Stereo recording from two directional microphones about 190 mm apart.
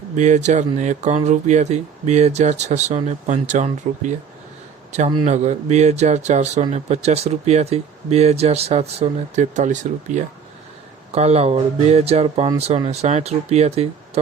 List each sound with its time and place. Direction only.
0.2 s a man's voice: 40° right (ahead or behind)